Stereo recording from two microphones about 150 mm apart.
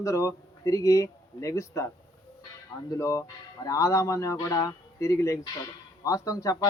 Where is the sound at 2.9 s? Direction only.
20° left (ahead or behind).